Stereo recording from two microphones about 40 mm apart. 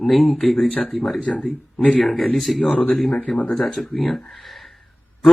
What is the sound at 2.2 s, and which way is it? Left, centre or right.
Speech, centre.